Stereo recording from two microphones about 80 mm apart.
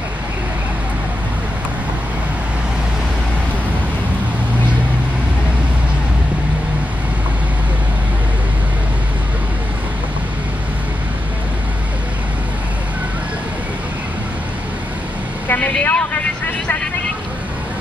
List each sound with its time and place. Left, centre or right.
15.5 s vehicle: centre